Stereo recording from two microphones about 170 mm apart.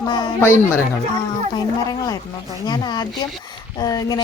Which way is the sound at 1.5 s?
20° left (ahead or behind).